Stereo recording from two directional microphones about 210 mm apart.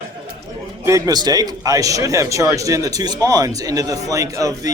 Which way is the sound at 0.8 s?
15° right (ahead or behind).